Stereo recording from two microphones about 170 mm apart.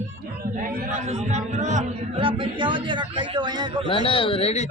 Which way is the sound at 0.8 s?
45° right (ahead or behind).